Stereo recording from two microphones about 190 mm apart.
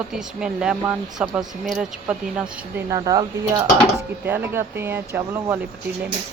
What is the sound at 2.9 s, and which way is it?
Speech, 20° right (ahead or behind).